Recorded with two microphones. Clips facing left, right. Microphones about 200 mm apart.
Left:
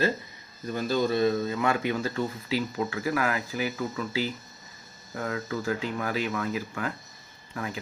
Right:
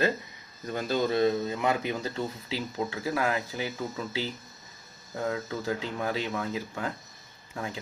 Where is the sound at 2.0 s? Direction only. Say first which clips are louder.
Left 3 dB; 25° right (ahead or behind).